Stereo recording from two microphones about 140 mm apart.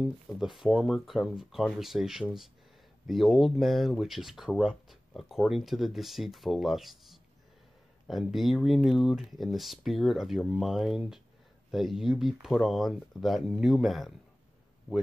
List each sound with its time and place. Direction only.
0.0 s speech: centre (ahead or behind)